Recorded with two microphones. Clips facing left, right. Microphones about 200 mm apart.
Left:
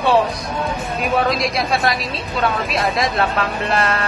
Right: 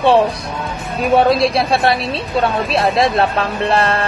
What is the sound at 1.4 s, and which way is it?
Speech, 30° right (ahead or behind).